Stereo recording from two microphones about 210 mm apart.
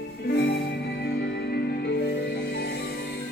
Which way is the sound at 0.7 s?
50° left (ahead or behind).